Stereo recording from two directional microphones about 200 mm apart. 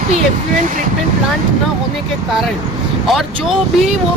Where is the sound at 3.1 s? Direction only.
Centre (ahead or behind).